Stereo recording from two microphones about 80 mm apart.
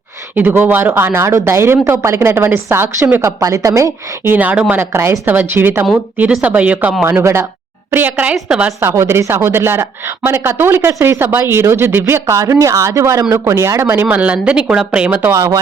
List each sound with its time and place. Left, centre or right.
0.3 s speech: right
4.4 s speech: centre
4.7 s speech: right
7.0 s a woman's voice: right; by 8.7 s centre
8.8 s speech: right
12.2 s speech: right; by 15.3 s centre
15.3 s speech: right